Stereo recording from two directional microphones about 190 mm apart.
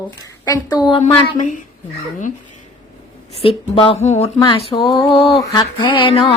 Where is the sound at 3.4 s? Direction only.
25° left (ahead or behind).